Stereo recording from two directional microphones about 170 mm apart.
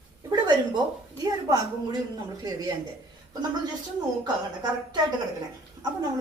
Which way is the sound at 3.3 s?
25° right (ahead or behind).